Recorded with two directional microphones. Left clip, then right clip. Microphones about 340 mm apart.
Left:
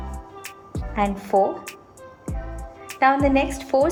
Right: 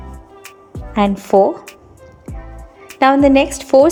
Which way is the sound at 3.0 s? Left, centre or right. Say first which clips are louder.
Right 7 dB; centre.